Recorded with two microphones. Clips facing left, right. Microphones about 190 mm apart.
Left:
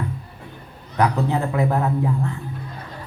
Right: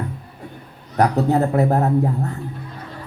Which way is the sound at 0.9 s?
45° right (ahead or behind).